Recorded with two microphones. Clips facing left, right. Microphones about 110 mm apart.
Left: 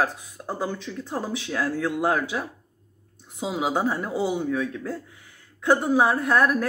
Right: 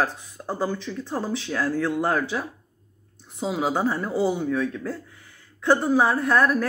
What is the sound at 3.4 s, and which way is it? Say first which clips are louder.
Speech: right 1 dB; 10° left (ahead or behind).